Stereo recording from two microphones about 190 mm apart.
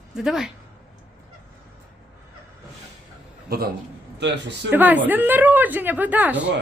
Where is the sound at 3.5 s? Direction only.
50° right (ahead or behind).